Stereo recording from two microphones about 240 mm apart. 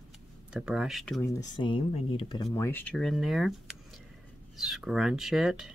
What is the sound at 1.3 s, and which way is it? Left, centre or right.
Speech, centre.